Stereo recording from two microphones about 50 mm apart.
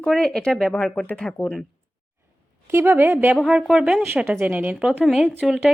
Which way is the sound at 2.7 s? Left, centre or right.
Right.